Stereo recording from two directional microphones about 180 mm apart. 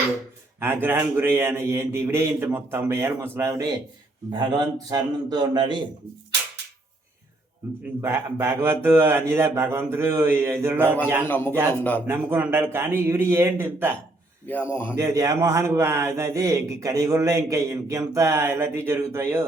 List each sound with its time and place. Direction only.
0.6 s a man's voice: 10° right (ahead or behind)
4.9 s speech: 20° right (ahead or behind)
8.0 s a man's voice: 15° right (ahead or behind)
10.8 s speech: 10° left (ahead or behind)
12.0 s a man's voice: 15° right (ahead or behind)
14.4 s speech: 10° left (ahead or behind)
14.9 s a man's voice: 20° right (ahead or behind)